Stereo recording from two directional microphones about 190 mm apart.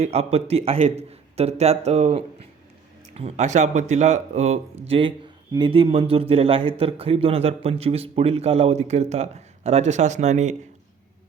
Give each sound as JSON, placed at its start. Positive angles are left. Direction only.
{"t": 0.0, "sound": "a man's voice", "side_deg": -35}